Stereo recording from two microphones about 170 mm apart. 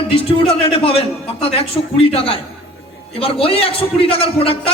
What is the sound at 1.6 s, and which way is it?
A man's voice, 35° left (ahead or behind).